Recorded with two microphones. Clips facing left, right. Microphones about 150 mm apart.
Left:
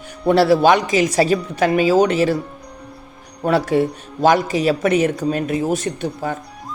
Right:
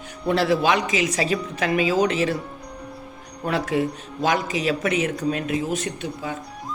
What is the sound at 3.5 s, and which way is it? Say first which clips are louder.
Speech: left 6 dB; 35° left (ahead or behind).